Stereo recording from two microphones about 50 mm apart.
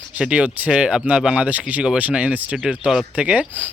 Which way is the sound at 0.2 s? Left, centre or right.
Centre.